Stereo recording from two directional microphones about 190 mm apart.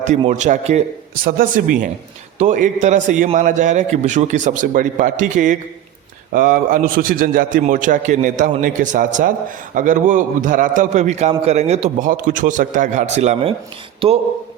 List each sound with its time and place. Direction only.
0.3 s a man's voice: 40° right (ahead or behind)